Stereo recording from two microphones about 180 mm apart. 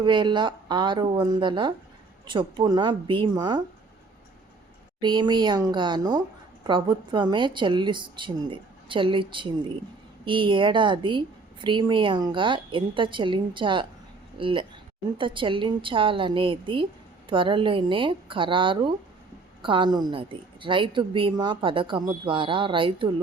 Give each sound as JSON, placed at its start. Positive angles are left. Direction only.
{"t": 0.0, "sound": "speech", "side_deg": -25}
{"t": 4.9, "sound": "speech", "side_deg": -25}